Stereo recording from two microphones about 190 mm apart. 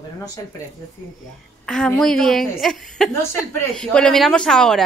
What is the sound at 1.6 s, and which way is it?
A woman's voice, 5° left (ahead or behind).